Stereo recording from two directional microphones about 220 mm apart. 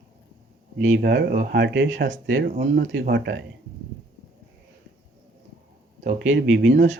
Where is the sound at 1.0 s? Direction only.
45° right (ahead or behind).